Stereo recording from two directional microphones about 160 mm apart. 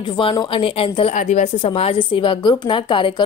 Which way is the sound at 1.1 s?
45° left (ahead or behind).